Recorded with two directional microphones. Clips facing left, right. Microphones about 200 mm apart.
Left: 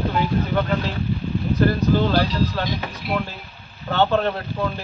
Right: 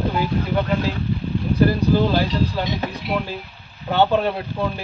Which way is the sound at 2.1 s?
20° right (ahead or behind).